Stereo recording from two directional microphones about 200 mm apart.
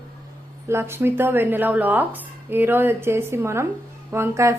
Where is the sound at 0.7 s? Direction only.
10° right (ahead or behind).